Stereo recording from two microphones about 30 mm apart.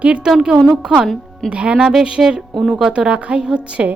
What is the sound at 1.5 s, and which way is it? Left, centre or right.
Speech, right.